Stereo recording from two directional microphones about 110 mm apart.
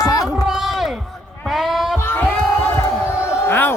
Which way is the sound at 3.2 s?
20° left (ahead or behind).